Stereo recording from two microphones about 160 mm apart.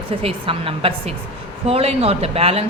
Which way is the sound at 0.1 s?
35° right (ahead or behind).